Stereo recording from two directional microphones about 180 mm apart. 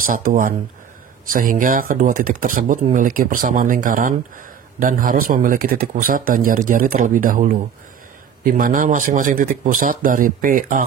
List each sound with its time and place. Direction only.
0.0 s speech: 50° right (ahead or behind)